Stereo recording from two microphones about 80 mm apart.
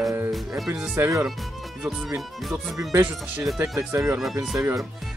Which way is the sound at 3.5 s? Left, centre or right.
Right.